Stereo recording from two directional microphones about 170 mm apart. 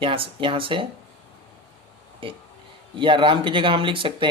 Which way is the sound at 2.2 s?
30° right (ahead or behind).